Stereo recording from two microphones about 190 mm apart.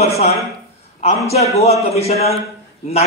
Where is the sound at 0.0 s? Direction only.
35° left (ahead or behind).